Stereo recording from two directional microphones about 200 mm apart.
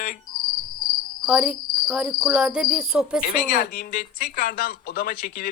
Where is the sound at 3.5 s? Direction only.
45° left (ahead or behind).